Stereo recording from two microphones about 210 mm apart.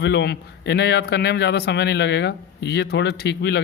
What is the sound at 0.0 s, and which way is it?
A man's voice, 55° left (ahead or behind).